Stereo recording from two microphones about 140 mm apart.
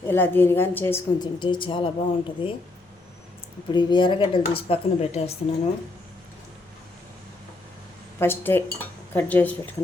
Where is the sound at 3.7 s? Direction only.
35° left (ahead or behind).